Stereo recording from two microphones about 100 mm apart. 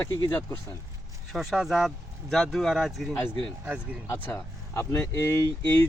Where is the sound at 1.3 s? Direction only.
5° right (ahead or behind).